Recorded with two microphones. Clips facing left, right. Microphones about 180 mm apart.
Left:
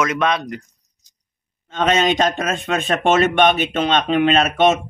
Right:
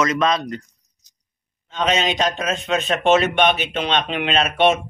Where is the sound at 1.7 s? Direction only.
50° left (ahead or behind).